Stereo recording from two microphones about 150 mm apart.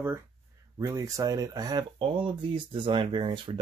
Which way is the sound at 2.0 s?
35° right (ahead or behind).